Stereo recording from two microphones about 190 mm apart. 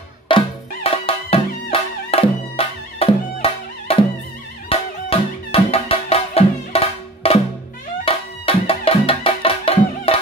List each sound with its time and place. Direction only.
0.3 s music: 25° left (ahead or behind)